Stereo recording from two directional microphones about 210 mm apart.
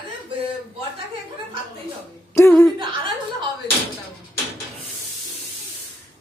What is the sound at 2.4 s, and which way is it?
Speech, 10° left (ahead or behind).